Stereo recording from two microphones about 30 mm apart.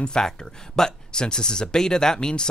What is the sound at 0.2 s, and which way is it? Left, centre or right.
Speech, left.